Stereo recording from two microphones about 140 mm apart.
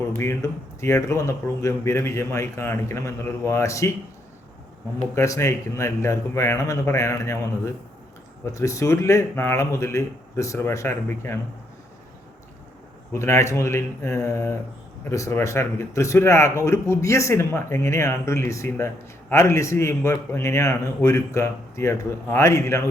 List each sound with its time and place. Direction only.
0.2 s speech: 20° left (ahead or behind)
5.1 s speech: 20° left (ahead or behind)
13.1 s speech: 20° left (ahead or behind)